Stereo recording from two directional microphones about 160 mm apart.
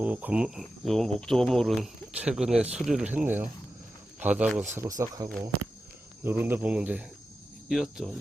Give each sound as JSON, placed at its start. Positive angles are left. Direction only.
{"t": 0.0, "sound": "speech", "side_deg": -10}
{"t": 2.7, "sound": "cricket", "side_deg": -5}
{"t": 4.8, "sound": "speech", "side_deg": -20}
{"t": 6.2, "sound": "cricket", "side_deg": -15}
{"t": 7.7, "sound": "speech", "side_deg": 0}